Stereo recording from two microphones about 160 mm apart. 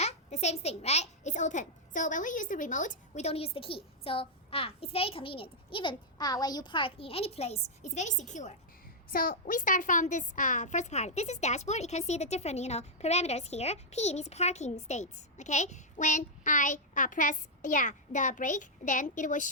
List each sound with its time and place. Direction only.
0.0 s a child's voice: 45° left (ahead or behind)
9.0 s a woman's voice: 60° left (ahead or behind)